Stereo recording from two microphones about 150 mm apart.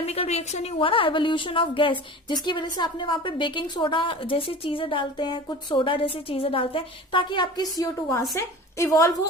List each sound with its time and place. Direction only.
0.0 s a woman's voice: 45° left (ahead or behind); by 9.1 s 20° left (ahead or behind)